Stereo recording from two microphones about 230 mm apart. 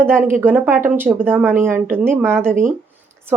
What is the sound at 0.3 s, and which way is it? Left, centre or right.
A woman's voice, centre.